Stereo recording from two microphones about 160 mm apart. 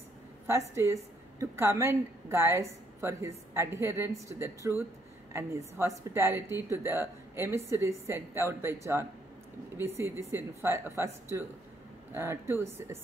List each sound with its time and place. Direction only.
0.5 s a woman's voice: 15° right (ahead or behind)
12.1 s a woman's voice: 15° right (ahead or behind)